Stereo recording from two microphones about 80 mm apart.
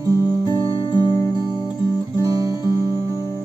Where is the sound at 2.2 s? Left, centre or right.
Right.